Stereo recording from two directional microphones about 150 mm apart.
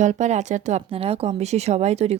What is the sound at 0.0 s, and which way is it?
Speech, 55° right (ahead or behind).